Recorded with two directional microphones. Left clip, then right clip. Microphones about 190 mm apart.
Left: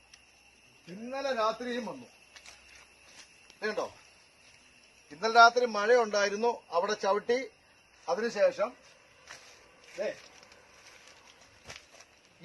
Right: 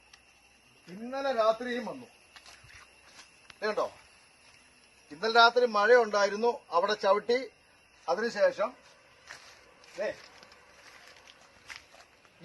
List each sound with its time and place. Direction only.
1.1 s a man's voice: 35° left (ahead or behind)
3.2 s a sound: 5° left (ahead or behind)
5.0 s a man's voice: 5° left (ahead or behind)
9.9 s speech: centre (ahead or behind)